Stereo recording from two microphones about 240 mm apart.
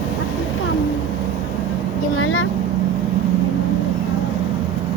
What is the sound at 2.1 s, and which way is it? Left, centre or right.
Vehicle, left.